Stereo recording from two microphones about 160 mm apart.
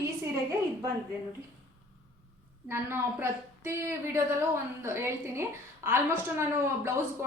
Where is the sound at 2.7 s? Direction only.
15° right (ahead or behind).